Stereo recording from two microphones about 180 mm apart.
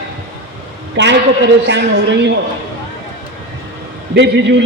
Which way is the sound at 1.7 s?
75° right (ahead or behind).